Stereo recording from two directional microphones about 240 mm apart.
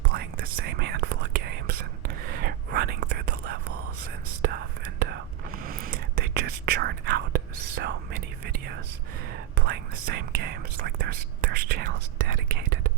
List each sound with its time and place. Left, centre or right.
0.0 s whispering: right
5.6 s whispering: right
9.6 s whispering: right